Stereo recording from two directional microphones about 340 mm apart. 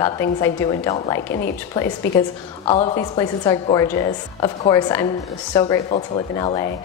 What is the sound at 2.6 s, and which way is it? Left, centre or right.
Speech, centre.